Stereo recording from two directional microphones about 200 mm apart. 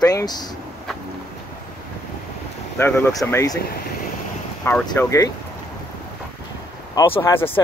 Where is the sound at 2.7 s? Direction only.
10° left (ahead or behind).